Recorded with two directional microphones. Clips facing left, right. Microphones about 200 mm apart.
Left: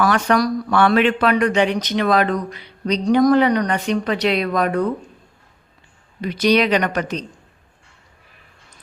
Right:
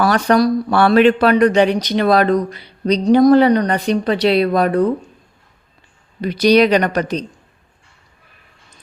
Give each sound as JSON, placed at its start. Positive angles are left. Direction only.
{"t": 0.0, "sound": "speech", "side_deg": -35}
{"t": 6.2, "sound": "speech", "side_deg": -35}